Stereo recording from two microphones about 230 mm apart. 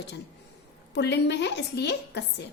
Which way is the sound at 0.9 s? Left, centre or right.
Left.